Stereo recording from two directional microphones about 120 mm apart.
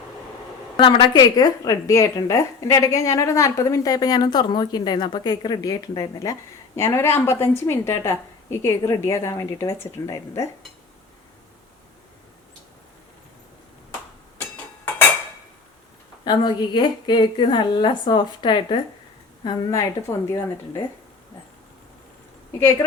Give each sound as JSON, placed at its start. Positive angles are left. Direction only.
{"t": 0.8, "sound": "a woman's voice", "side_deg": 45}
{"t": 1.2, "sound": "a woman's voice", "side_deg": 30}
{"t": 16.2, "sound": "a woman's voice", "side_deg": 40}
{"t": 19.5, "sound": "a woman's voice", "side_deg": 25}